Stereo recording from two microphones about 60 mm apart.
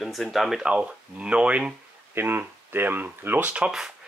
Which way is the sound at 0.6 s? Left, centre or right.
Centre.